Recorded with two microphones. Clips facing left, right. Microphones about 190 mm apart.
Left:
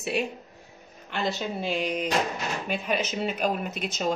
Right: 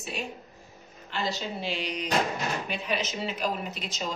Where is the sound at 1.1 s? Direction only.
55° left (ahead or behind).